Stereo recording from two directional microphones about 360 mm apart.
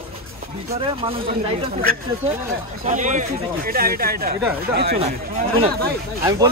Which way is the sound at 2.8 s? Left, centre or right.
Right.